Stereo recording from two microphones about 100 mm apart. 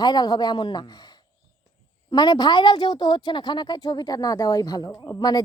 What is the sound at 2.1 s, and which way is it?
A woman's voice, 45° left (ahead or behind).